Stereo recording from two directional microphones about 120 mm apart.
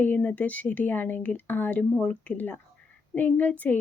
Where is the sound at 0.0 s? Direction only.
15° left (ahead or behind).